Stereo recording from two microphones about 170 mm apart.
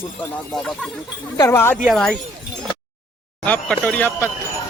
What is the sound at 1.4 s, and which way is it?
Speech, 15° left (ahead or behind).